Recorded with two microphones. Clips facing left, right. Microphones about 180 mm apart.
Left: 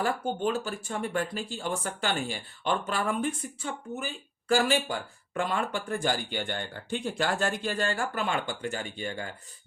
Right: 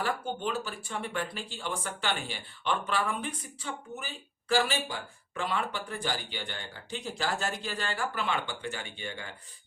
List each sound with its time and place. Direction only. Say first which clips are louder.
0.0 s speech: left 4 dB; 45° left (ahead or behind)